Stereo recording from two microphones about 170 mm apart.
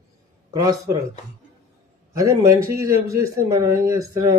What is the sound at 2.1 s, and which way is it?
A man's voice, 20° right (ahead or behind).